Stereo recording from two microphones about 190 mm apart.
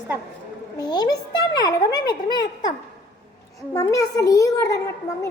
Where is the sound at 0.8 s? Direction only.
20° left (ahead or behind).